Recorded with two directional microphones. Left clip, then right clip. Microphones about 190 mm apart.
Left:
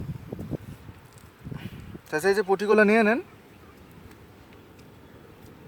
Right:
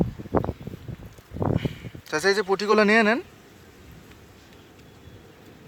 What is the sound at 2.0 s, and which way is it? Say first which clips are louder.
Speech: right 1 dB; centre (ahead or behind).